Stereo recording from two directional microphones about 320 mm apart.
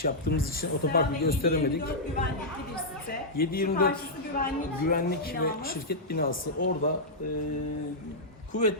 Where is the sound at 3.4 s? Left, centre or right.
Left.